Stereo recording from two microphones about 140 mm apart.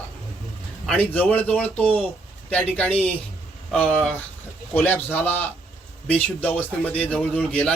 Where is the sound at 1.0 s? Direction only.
10° left (ahead or behind).